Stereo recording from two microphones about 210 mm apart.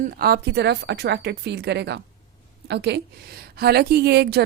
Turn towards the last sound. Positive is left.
turn(degrees=-55)  # may be behind; listen again after turning